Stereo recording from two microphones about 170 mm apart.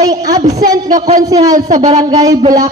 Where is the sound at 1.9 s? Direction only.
20° right (ahead or behind).